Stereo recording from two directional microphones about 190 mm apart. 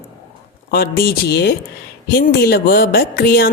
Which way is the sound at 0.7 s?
50° left (ahead or behind).